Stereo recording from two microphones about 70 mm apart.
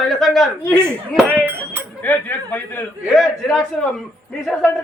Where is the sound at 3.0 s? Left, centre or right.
Centre.